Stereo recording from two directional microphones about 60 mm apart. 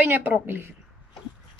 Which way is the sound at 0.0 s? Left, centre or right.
Right.